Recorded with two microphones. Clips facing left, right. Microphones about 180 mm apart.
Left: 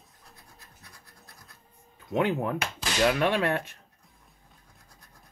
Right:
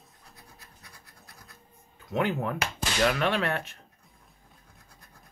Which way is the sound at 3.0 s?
15° left (ahead or behind).